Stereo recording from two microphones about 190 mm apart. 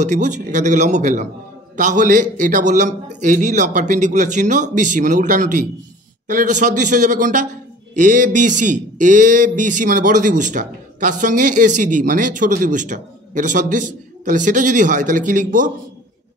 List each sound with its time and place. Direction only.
0.0 s a man's voice: 40° right (ahead or behind)